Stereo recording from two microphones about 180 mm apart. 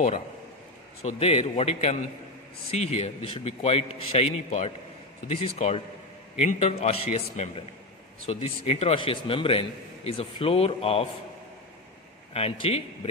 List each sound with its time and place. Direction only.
1.0 s a man's voice: 35° left (ahead or behind)
12.4 s a man's voice: 35° left (ahead or behind)